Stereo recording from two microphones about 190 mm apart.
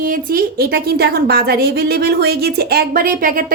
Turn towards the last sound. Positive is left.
turn(degrees=-45)  # may be behind; listen again after turning